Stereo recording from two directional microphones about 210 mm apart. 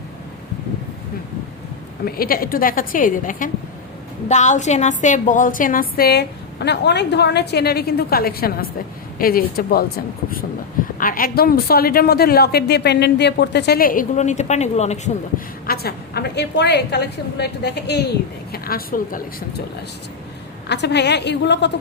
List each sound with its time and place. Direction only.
2.0 s a woman's voice: 45° left (ahead or behind)
11.0 s a woman's voice: 40° left (ahead or behind)
15.6 s a woman's voice: 45° left (ahead or behind)
20.7 s a woman's voice: 55° left (ahead or behind)